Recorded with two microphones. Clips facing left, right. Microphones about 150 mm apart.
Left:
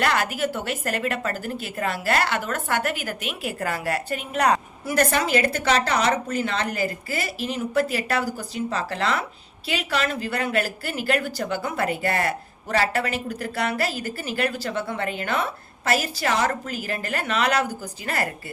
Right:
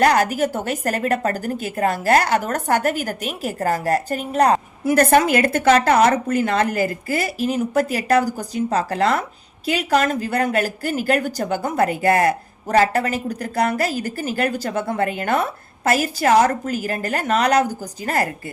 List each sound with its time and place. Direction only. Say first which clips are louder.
0.0 s speech: right 7 dB; 40° right (ahead or behind)
4.9 s speech: right 6 dB; 50° right (ahead or behind)